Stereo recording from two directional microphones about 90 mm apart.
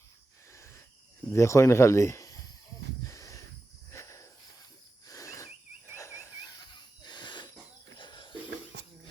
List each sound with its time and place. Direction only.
0.5 s cricket: 30° left (ahead or behind)
1.3 s speech: 30° left (ahead or behind)
3.0 s a sound: 35° left (ahead or behind)
5.0 s cricket: 40° left (ahead or behind)
6.7 s wheeze: 55° left (ahead or behind)
7.9 s a sound: 65° left (ahead or behind)